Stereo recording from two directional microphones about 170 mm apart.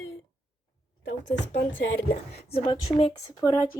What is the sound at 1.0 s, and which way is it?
Speech, 90° left.